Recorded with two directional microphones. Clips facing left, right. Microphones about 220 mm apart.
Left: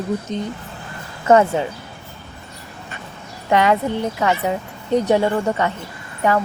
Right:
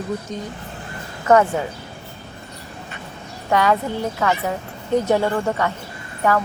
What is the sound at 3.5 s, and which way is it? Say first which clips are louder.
A woman's voice: left 2 dB; 20° left (ahead or behind).